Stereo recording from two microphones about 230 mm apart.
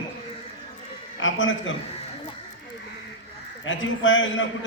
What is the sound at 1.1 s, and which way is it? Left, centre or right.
Speech, left.